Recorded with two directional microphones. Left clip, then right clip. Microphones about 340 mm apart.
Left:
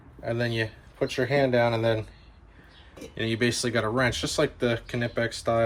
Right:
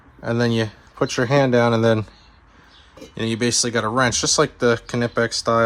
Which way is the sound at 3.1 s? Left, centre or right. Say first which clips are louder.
Right 6 dB; centre.